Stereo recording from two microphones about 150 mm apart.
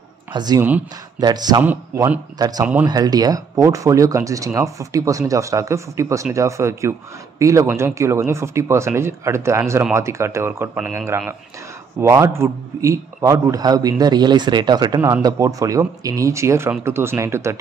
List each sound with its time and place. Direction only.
0.3 s speech: 30° right (ahead or behind)
0.6 s speech: 10° right (ahead or behind)
1.2 s a man's voice: 25° right (ahead or behind)
1.6 s speech: 10° right (ahead or behind)
2.3 s a man's voice: 25° right (ahead or behind)
2.6 s speech: 10° right (ahead or behind)
2.9 s a man's voice: 25° right (ahead or behind)